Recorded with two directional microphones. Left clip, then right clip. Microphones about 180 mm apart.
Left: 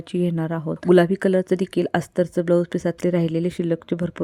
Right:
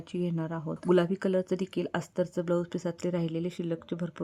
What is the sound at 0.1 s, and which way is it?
Speech, 35° left (ahead or behind).